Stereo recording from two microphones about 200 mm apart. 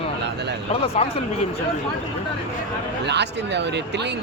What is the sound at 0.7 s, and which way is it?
Speech, 30° left (ahead or behind).